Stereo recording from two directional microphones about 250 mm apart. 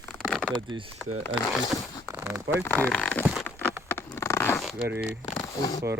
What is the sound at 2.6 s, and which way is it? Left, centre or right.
Speech, centre.